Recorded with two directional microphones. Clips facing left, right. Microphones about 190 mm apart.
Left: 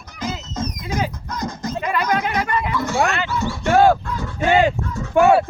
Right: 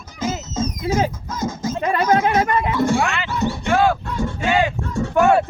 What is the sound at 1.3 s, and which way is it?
Sheep, 5° right (ahead or behind).